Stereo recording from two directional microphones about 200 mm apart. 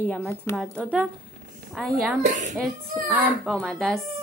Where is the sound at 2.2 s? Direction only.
40° right (ahead or behind).